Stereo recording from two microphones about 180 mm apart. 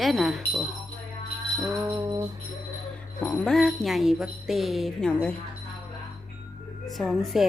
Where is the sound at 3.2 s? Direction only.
5° left (ahead or behind).